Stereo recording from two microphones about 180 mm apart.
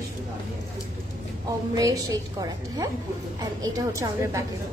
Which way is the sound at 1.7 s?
20° right (ahead or behind).